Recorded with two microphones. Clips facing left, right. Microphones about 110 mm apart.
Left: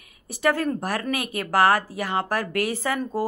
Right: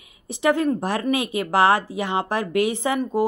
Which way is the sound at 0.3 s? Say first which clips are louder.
Right 3 dB; 20° right (ahead or behind).